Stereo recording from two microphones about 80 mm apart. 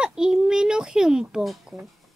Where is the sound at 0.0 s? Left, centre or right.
Centre.